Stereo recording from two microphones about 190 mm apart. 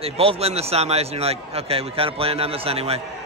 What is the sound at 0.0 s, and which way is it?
A man's voice, 30° right (ahead or behind).